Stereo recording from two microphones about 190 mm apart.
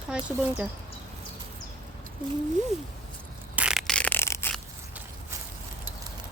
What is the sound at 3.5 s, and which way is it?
Crushing, 5° right (ahead or behind).